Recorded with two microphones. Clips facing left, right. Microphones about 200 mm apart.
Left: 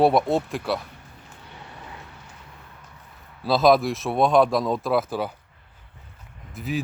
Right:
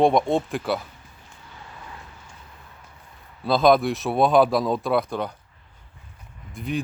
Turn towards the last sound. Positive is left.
turn(degrees=5)  # may be behind; listen again after turning